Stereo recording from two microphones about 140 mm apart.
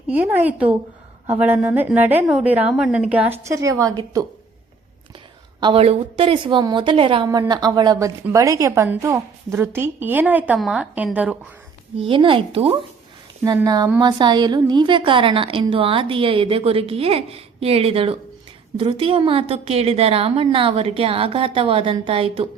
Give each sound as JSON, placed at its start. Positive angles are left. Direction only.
{"t": 0.1, "sound": "a woman's voice", "side_deg": -10}
{"t": 5.5, "sound": "a woman's voice", "side_deg": -35}
{"t": 5.8, "sound": "a woman's voice", "side_deg": -45}
{"t": 11.9, "sound": "a woman's voice", "side_deg": -40}
{"t": 13.7, "sound": "a woman's voice", "side_deg": -25}